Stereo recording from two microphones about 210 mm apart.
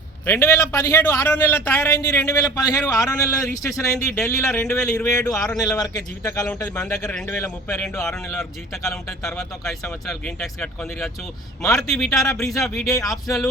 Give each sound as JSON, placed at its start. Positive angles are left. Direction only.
{"t": 0.3, "sound": "a man's voice", "side_deg": 10}
{"t": 12.9, "sound": "a man's voice", "side_deg": 15}